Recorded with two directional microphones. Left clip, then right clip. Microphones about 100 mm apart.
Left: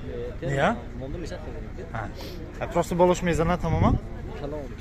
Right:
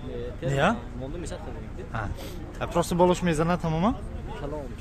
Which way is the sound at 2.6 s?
50° right (ahead or behind).